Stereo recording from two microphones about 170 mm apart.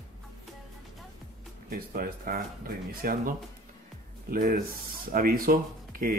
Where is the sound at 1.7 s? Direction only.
55° right (ahead or behind).